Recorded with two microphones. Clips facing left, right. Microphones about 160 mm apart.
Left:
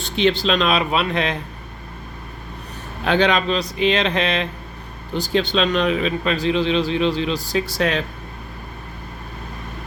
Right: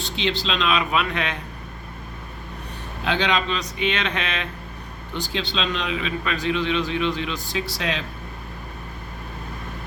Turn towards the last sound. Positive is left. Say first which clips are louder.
# left 6 dB
turn(degrees=50)  # may be behind; listen again after turning